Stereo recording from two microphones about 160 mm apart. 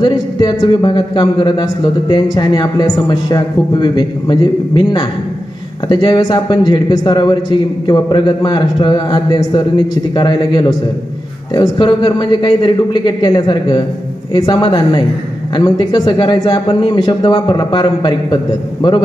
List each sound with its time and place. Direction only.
0.0 s a man's voice: 25° left (ahead or behind)